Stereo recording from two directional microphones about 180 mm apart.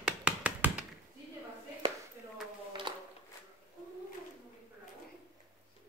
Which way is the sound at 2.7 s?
25° right (ahead or behind).